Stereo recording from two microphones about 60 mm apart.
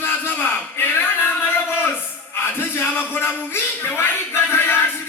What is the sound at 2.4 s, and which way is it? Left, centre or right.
Music, left.